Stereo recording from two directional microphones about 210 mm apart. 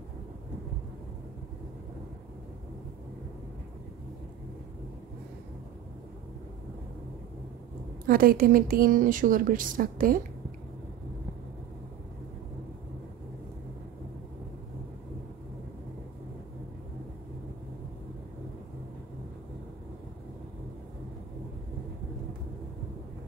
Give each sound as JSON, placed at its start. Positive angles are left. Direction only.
{"t": 8.1, "sound": "a woman's voice", "side_deg": -45}